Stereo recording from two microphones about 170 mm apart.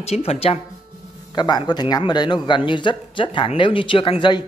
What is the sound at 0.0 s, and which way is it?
Speech, 40° left (ahead or behind).